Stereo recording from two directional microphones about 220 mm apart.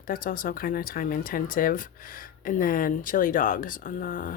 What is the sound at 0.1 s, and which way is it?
Speech, 40° left (ahead or behind).